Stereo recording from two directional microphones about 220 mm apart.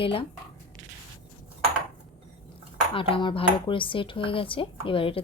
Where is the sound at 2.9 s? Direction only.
25° left (ahead or behind).